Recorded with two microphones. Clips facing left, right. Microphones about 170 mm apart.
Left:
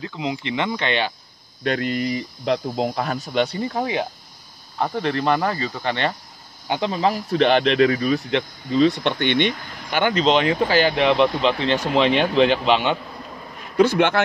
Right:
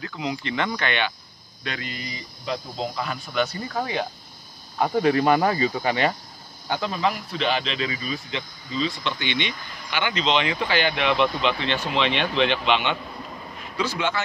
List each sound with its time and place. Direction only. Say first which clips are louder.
0.0 s speech: left 3 dB; 20° left (ahead or behind)
0.7 s speech: left 3 dB; 30° left (ahead or behind)
1.6 s speech: left 11 dB; 50° left (ahead or behind)
3.3 s speech: left 3 dB; 25° left (ahead or behind)
4.7 s speech: right 3 dB; 10° right (ahead or behind)
6.7 s speech: left 4 dB; 25° left (ahead or behind)
7.2 s speech: left 9 dB; 55° left (ahead or behind); by 13.0 s 35° left (ahead or behind)
13.7 s speech: left 9 dB; 60° left (ahead or behind)